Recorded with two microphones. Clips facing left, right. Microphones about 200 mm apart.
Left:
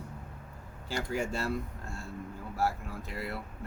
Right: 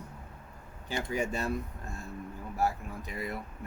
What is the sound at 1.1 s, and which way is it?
Speech, 20° right (ahead or behind).